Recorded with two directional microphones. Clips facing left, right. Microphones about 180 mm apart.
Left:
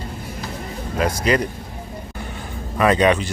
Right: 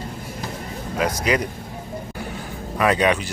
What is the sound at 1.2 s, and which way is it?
Speech, 10° right (ahead or behind).